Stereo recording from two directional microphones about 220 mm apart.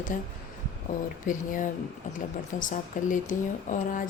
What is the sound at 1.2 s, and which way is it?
Speech, 35° left (ahead or behind).